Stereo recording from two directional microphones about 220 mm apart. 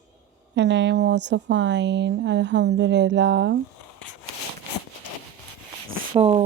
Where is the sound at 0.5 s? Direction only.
50° right (ahead or behind).